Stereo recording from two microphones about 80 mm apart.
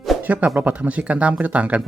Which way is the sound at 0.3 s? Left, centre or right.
Centre.